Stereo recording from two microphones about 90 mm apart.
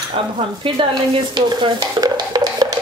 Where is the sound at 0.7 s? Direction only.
60° right (ahead or behind).